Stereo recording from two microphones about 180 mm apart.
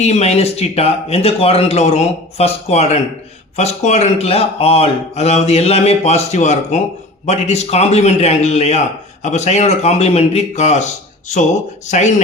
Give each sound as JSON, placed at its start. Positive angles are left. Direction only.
{"t": 0.0, "sound": "speech", "side_deg": 40}
{"t": 11.9, "sound": "speech", "side_deg": 40}